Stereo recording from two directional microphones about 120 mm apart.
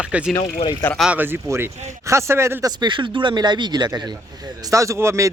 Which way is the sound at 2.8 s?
40° right (ahead or behind).